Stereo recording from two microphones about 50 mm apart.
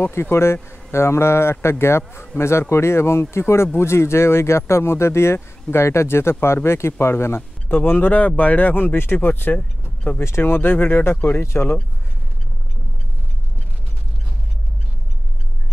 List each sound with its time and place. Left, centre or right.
0.0 s speech: left
7.6 s speech: left
10.2 s speech: left